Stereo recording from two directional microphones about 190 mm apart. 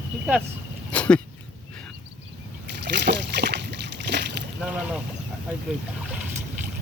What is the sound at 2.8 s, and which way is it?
Splash, 65° right (ahead or behind).